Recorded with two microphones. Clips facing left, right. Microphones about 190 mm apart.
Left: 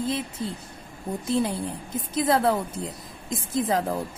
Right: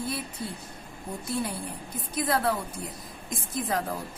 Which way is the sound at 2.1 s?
25° left (ahead or behind).